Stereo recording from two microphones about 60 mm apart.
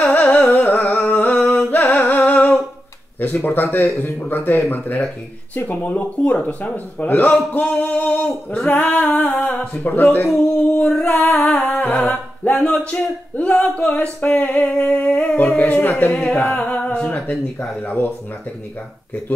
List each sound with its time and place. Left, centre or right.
0.0 s music: left
3.2 s speech: left
11.0 s music: left
12.9 s speech: left
16.1 s speech: centre